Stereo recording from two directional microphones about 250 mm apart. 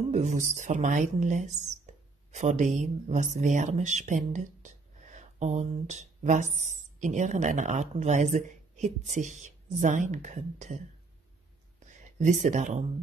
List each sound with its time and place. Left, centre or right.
0.0 s a woman's voice: right
11.8 s speech: right